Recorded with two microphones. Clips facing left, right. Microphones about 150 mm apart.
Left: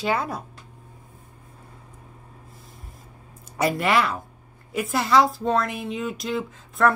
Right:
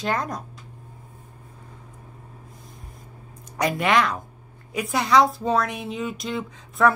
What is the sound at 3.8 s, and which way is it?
Speech, 5° left (ahead or behind).